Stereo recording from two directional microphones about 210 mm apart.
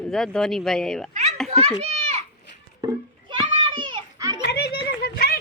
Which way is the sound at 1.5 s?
30° right (ahead or behind).